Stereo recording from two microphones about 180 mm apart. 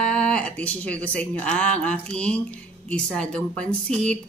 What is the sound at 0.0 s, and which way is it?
Speech, 5° left (ahead or behind).